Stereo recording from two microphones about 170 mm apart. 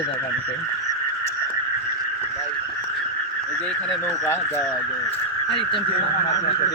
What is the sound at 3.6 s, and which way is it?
Speech, 5° left (ahead or behind).